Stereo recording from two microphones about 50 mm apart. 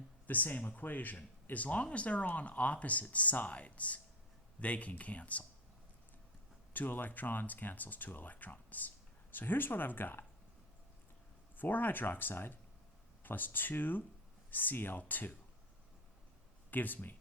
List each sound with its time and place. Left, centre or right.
0.3 s speech: left
6.7 s speech: left
11.5 s speech: left
16.7 s speech: left